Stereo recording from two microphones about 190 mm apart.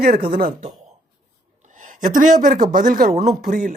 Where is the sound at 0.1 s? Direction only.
30° right (ahead or behind).